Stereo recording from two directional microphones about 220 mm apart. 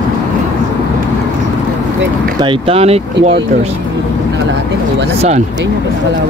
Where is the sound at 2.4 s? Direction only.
25° right (ahead or behind).